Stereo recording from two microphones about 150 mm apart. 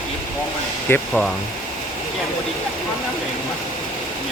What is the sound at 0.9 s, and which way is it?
Speech, 15° left (ahead or behind).